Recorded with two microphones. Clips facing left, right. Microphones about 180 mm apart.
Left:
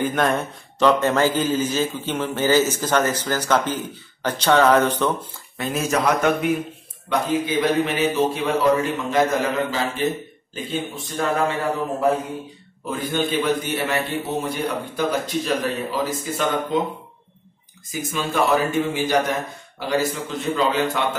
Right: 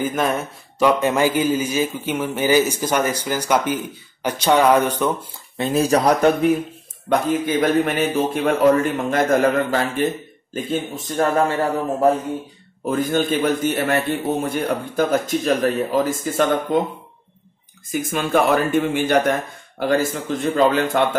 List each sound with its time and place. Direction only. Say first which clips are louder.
0.0 s a man's voice: even; 5° right (ahead or behind)
5.6 s speech: right 5 dB; 30° right (ahead or behind)
7.1 s a man's voice: right 3 dB; 45° right (ahead or behind)
12.8 s a man's voice: right 4 dB; 50° right (ahead or behind)
17.9 s a man's voice: right 4 dB; 55° right (ahead or behind)